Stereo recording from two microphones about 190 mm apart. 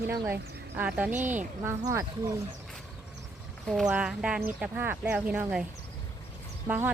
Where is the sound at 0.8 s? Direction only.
5° right (ahead or behind).